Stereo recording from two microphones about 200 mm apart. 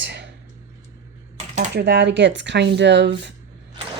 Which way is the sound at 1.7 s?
55° right (ahead or behind).